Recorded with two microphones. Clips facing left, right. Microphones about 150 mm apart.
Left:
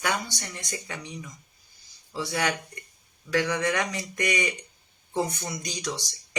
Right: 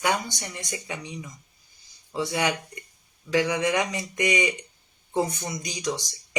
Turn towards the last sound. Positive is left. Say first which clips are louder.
# right 4 dB
turn(degrees=-15)  # may be behind; listen again after turning